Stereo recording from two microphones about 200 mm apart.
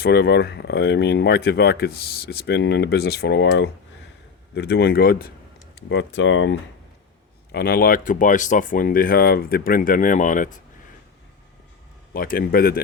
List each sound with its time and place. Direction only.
0.0 s speech: 55° left (ahead or behind)
5.7 s speech: 65° left (ahead or behind)
7.5 s speech: 50° left (ahead or behind)
12.1 s speech: 45° left (ahead or behind)